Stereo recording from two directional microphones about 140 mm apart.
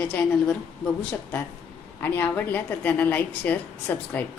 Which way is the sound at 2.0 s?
15° left (ahead or behind).